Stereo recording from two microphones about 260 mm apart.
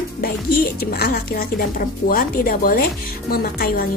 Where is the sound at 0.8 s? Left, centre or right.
Left.